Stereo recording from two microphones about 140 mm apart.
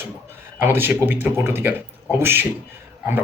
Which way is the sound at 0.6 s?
15° right (ahead or behind).